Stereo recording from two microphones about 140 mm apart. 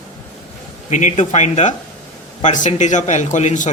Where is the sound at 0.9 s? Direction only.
60° left (ahead or behind).